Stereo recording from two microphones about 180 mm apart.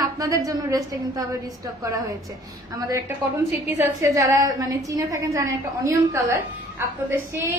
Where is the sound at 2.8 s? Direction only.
15° right (ahead or behind).